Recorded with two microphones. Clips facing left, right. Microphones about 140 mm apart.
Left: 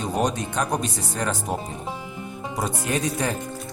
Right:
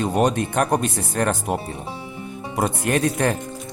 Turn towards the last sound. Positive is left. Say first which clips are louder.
# right 5 dB
turn(degrees=-60)  # may be behind; listen again after turning